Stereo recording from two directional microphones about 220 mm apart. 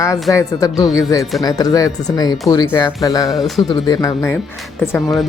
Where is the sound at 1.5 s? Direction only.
15° left (ahead or behind).